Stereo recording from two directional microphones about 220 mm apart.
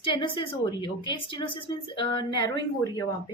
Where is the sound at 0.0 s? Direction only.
20° left (ahead or behind).